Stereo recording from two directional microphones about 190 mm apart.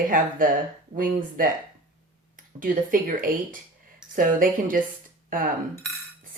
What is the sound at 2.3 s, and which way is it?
Speech, 45° right (ahead or behind).